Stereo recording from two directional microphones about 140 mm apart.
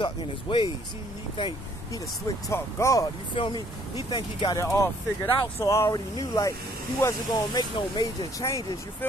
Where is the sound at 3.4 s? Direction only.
35° left (ahead or behind).